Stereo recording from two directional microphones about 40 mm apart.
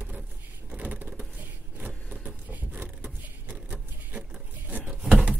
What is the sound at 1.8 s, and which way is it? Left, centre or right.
Vehicle, right.